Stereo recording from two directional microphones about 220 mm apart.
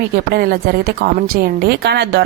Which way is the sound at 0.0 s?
45° right (ahead or behind).